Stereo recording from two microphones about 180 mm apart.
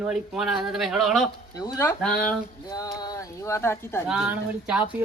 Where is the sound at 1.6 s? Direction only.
15° left (ahead or behind).